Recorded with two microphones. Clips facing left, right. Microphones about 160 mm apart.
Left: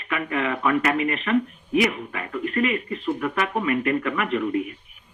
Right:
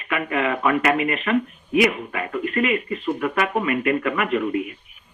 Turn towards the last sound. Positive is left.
turn(degrees=-70)  # may be behind; listen again after turning